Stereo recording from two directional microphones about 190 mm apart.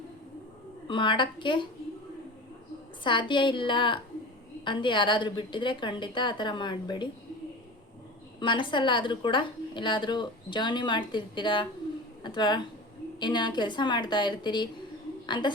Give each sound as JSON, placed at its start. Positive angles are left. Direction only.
{"t": 0.9, "sound": "a woman's voice", "side_deg": 25}
{"t": 3.0, "sound": "a woman's voice", "side_deg": 25}
{"t": 8.4, "sound": "a woman's voice", "side_deg": 25}